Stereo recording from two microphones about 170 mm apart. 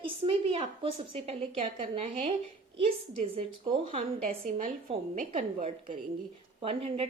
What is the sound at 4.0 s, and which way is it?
A woman's voice, 55° right (ahead or behind).